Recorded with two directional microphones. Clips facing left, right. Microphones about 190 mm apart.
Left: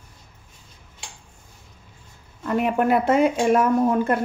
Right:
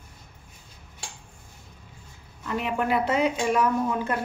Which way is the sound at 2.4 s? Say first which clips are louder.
Left 6 dB; 50° left (ahead or behind).